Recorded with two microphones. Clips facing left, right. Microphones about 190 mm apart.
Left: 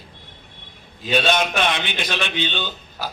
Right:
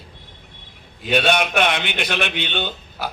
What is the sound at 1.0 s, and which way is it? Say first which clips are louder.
A man's voice: right 1 dB; 60° right (ahead or behind).